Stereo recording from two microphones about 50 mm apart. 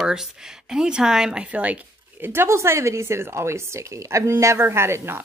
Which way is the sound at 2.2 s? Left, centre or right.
Right.